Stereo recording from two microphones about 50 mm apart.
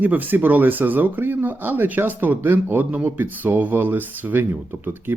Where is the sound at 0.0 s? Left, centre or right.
Right.